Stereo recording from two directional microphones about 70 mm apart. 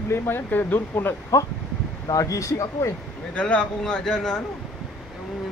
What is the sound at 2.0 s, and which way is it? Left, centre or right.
Speech, left.